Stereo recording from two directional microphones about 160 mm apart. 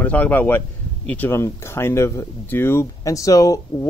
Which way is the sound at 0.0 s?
10° left (ahead or behind).